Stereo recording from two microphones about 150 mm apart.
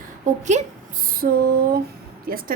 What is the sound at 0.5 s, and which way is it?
Speech, 50° right (ahead or behind).